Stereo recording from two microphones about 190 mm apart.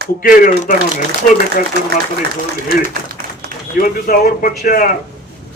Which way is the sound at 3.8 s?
50° left (ahead or behind).